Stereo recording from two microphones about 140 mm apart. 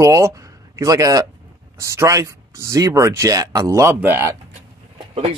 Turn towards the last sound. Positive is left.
turn(degrees=-45)  # may be behind; listen again after turning